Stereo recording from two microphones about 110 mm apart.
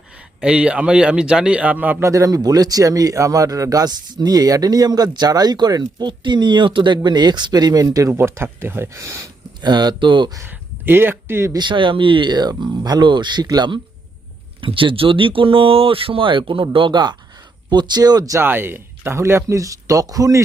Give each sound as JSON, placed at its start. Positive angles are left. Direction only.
{"t": 0.4, "sound": "a man's voice", "side_deg": -10}
{"t": 9.6, "sound": "a man's voice", "side_deg": -40}
{"t": 10.3, "sound": "speech", "side_deg": -20}
{"t": 11.5, "sound": "speech", "side_deg": -45}
{"t": 14.6, "sound": "a man's voice", "side_deg": -50}
{"t": 18.3, "sound": "speech", "side_deg": -20}